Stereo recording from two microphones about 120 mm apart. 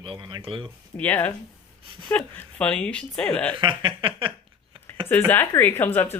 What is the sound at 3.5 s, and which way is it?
Speech, 45° right (ahead or behind).